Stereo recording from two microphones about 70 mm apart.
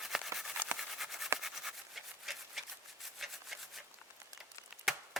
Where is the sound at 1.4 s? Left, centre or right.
Centre.